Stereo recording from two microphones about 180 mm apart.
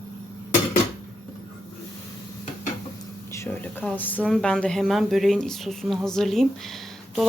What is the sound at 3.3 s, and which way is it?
Speech, 10° left (ahead or behind).